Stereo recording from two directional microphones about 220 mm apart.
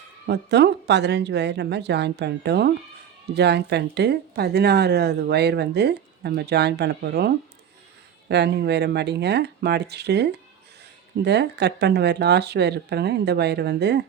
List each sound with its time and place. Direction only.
0.3 s speech: 50° right (ahead or behind)